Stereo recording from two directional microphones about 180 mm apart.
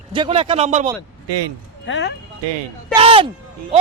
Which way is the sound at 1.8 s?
85° left.